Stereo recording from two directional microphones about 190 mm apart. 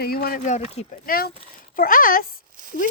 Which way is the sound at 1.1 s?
50° left (ahead or behind).